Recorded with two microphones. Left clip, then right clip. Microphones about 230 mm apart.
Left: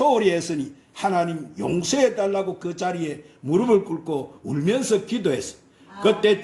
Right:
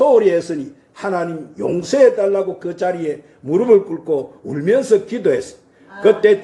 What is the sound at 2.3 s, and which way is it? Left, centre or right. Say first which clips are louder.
A man's voice: right 6 dB; left.